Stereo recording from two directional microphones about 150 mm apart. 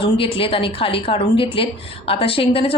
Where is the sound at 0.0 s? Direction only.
35° left (ahead or behind).